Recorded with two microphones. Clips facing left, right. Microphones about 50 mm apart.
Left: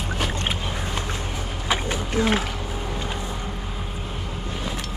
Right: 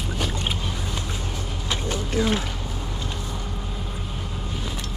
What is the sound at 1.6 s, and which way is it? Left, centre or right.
Vehicle, centre.